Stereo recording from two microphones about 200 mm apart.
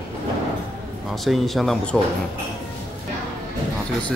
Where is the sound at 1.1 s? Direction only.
Centre (ahead or behind).